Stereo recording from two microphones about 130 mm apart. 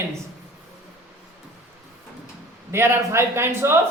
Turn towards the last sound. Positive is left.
turn(degrees=-20)  # may be behind; listen again after turning